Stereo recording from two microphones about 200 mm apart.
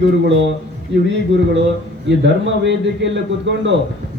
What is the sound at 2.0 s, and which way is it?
A man's voice, 65° right (ahead or behind).